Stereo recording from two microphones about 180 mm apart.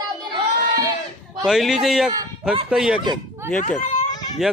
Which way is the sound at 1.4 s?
Centre (ahead or behind).